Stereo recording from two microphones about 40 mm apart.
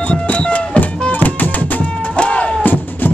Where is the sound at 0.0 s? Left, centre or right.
Left.